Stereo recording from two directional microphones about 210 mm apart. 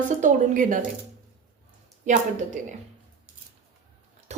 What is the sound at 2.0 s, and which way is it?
Speech, 35° right (ahead or behind).